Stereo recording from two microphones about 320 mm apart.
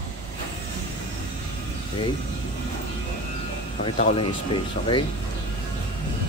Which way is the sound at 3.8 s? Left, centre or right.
Centre.